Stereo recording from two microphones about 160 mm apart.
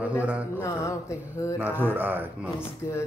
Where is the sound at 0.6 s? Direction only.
20° left (ahead or behind).